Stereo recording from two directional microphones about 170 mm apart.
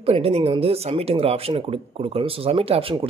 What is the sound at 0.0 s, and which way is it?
Speech, 35° right (ahead or behind).